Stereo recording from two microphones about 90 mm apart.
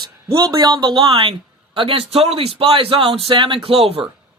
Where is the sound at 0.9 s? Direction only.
70° right (ahead or behind).